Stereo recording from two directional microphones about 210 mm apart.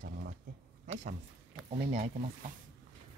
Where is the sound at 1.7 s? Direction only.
30° right (ahead or behind).